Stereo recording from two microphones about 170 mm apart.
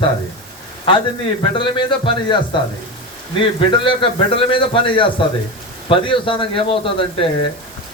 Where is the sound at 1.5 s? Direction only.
30° left (ahead or behind).